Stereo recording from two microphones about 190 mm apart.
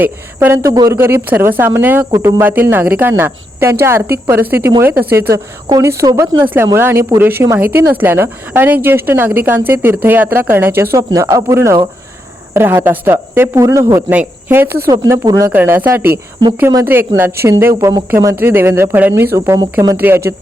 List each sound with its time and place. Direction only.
0.0 s a woman's voice: 10° right (ahead or behind)